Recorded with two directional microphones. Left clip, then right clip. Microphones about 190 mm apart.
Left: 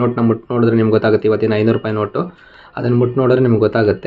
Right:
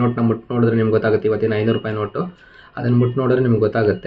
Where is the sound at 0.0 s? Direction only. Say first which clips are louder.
Left 4 dB; 35° left (ahead or behind).